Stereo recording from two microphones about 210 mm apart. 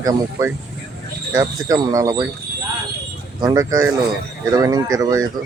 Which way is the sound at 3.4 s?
20° right (ahead or behind).